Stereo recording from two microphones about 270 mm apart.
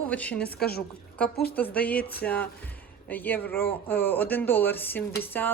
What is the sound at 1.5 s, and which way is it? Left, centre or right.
Speech, centre.